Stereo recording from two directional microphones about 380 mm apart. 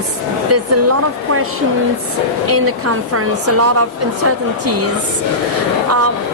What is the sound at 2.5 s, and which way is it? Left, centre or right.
Speech, right.